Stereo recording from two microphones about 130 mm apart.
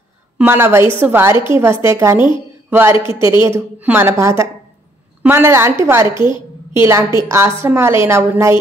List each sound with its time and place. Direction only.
0.4 s a woman's voice: 20° right (ahead or behind)
6.1 s a woman's voice: 35° left (ahead or behind)
6.7 s a woman's voice: 20° right (ahead or behind)